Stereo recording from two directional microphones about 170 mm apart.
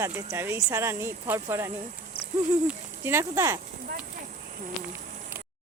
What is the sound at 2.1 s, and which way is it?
Owl, 35° left (ahead or behind).